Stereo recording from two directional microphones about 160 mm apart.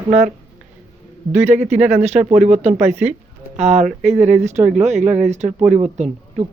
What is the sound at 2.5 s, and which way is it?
A woman's voice, 45° right (ahead or behind).